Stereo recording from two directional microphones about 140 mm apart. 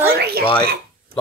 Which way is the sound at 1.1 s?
90° right.